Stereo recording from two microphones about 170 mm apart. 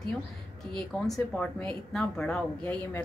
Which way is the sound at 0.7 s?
5° left (ahead or behind).